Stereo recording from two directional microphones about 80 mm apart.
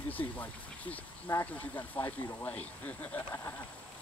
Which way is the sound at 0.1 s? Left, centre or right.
Left.